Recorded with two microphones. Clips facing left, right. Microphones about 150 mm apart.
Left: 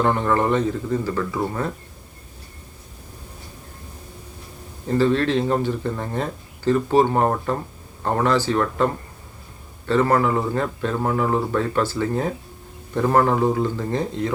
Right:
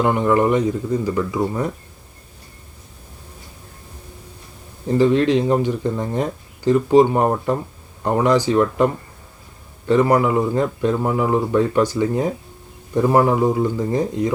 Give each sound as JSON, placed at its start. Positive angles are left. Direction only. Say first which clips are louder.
{"t": 0.0, "sound": "speech", "louder": "right 3 dB", "side_deg": -15}
{"t": 4.9, "sound": "speech", "louder": "right 4 dB", "side_deg": -15}